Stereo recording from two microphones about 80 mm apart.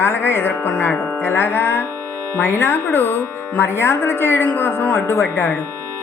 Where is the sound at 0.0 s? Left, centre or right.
Left.